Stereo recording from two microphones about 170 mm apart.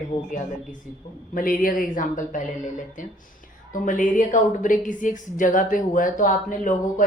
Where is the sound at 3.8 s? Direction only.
50° left (ahead or behind).